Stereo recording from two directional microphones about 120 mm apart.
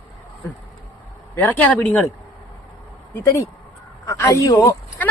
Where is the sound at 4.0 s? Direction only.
30° left (ahead or behind).